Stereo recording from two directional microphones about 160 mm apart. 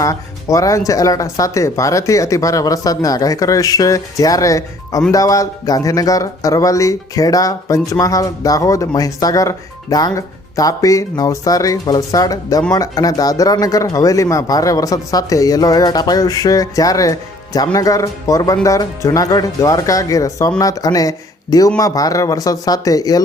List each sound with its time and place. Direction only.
0.0 s speech: 20° left (ahead or behind)